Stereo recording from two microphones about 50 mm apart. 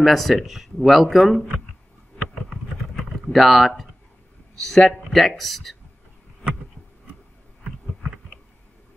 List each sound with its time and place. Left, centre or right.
0.0 s speech: centre
3.3 s speech: centre